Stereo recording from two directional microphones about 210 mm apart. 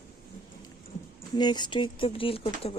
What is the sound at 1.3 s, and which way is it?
Speech, 20° left (ahead or behind).